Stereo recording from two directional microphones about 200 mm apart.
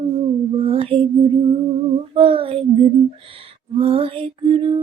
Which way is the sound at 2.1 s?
25° right (ahead or behind).